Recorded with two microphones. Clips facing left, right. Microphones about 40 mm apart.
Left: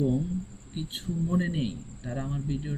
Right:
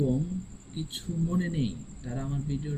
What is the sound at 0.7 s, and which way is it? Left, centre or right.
Speech, centre.